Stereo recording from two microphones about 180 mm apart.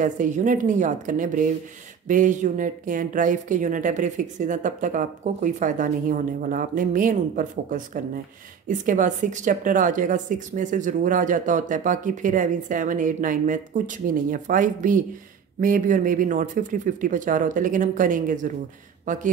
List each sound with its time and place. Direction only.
0.0 s speech: 45° right (ahead or behind)